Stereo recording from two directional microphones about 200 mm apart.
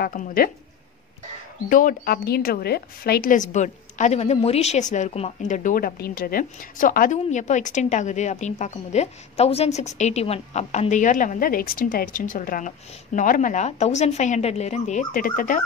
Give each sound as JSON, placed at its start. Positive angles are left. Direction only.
{"t": 0.0, "sound": "speech", "side_deg": 45}
{"t": 1.7, "sound": "a woman's voice", "side_deg": 40}